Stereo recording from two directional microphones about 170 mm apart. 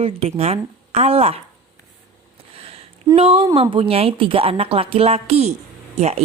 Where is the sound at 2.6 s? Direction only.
35° right (ahead or behind).